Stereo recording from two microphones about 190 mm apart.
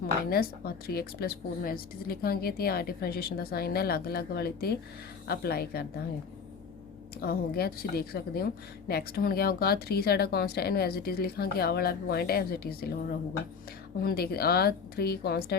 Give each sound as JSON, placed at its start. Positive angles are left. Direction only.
{"t": 0.3, "sound": "a woman's voice", "side_deg": 50}
{"t": 7.2, "sound": "a woman's voice", "side_deg": 55}